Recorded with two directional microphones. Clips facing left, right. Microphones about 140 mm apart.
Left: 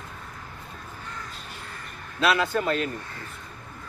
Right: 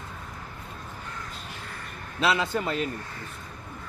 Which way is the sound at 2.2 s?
20° right (ahead or behind).